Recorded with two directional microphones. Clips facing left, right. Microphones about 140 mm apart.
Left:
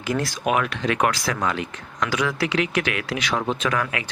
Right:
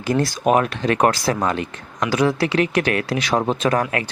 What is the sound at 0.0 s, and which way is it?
Speech, 35° right (ahead or behind).